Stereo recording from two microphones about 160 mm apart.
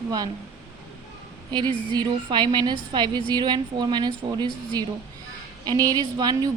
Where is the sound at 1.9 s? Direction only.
25° right (ahead or behind).